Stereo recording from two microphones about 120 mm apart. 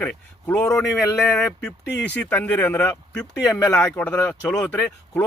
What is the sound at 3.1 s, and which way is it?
Speech, 5° left (ahead or behind).